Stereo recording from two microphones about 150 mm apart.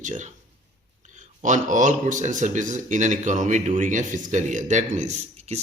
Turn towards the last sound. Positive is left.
turn(degrees=-50)  # may be behind; listen again after turning